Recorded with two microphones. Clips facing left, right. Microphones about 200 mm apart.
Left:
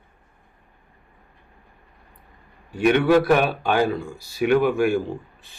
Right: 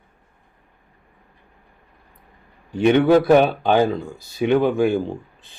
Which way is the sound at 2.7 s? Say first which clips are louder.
Right 3 dB; 25° right (ahead or behind).